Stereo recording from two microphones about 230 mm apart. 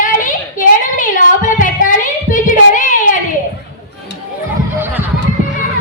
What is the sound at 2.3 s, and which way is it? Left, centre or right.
Child singing, left.